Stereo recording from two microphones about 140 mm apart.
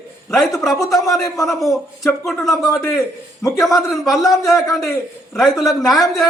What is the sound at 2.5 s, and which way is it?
Speech, 25° left (ahead or behind).